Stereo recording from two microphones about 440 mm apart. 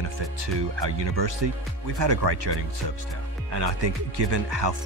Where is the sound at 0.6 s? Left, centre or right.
Right.